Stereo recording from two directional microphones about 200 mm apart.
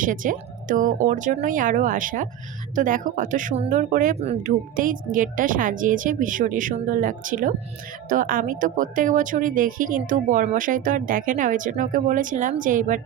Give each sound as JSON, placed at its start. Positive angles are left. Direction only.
{"t": 0.0, "sound": "speech", "side_deg": -40}